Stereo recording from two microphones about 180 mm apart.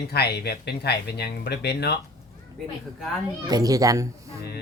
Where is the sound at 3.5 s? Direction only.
20° right (ahead or behind).